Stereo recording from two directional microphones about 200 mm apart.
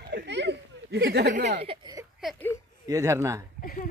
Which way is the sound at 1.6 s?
25° right (ahead or behind).